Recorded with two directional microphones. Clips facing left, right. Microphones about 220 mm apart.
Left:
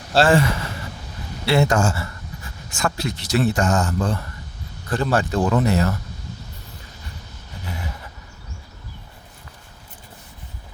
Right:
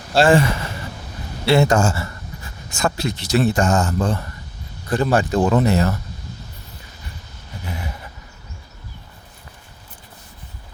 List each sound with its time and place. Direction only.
0.1 s speech: 15° right (ahead or behind)
1.5 s speech: 25° right (ahead or behind)
4.9 s speech: 15° right (ahead or behind)